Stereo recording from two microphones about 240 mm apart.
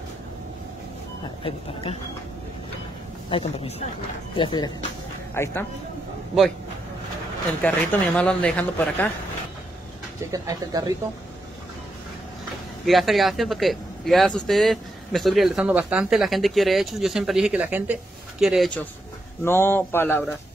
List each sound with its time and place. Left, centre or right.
1.4 s speech: left
3.3 s speech: left
7.6 s speech: centre
10.3 s speech: centre
12.8 s speech: centre
19.4 s speech: centre